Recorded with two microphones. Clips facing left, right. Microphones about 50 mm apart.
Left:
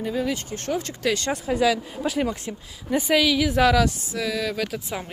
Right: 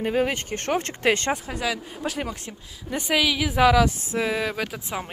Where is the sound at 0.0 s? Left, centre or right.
Right.